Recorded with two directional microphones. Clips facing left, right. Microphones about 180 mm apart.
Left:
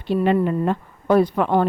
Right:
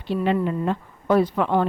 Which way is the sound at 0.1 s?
50° left (ahead or behind).